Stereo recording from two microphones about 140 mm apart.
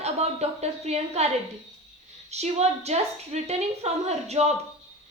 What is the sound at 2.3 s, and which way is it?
A woman's voice, 50° right (ahead or behind).